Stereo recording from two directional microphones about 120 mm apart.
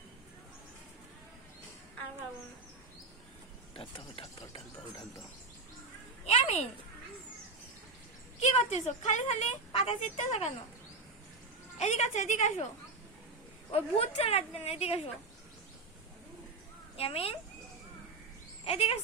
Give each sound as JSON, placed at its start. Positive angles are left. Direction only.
{"t": 3.8, "sound": "stir", "side_deg": 50}
{"t": 6.2, "sound": "a sound", "side_deg": 60}
{"t": 8.4, "sound": "a woman's voice", "side_deg": 65}
{"t": 9.7, "sound": "a woman's voice", "side_deg": 60}
{"t": 11.8, "sound": "a woman's voice", "side_deg": 75}
{"t": 13.7, "sound": "a woman's voice", "side_deg": 55}
{"t": 17.0, "sound": "speech", "side_deg": 55}
{"t": 18.6, "sound": "a sound", "side_deg": 60}